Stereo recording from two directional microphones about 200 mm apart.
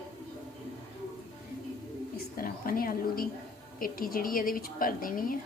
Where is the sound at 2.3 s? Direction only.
45° left (ahead or behind).